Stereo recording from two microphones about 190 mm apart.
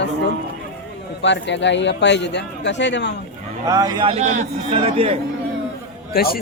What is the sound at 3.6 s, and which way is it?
Speech, 20° right (ahead or behind).